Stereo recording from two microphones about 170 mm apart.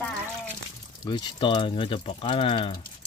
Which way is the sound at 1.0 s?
25° left (ahead or behind).